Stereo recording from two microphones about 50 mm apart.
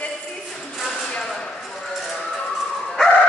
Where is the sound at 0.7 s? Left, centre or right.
Centre.